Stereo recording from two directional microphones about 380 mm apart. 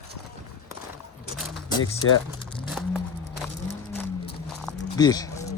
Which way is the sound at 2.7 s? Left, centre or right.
Centre.